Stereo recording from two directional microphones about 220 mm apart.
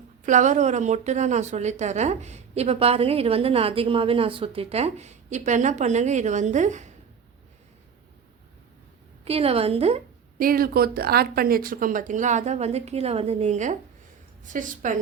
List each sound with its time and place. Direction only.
0.3 s a woman's voice: 35° right (ahead or behind)
9.2 s a woman's voice: 25° right (ahead or behind)
10.4 s a woman's voice: 40° right (ahead or behind)